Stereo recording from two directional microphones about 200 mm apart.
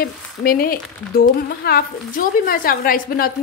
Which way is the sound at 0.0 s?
50° left (ahead or behind).